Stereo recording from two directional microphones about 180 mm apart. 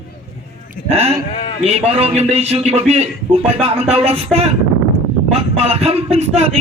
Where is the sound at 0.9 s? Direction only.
35° right (ahead or behind).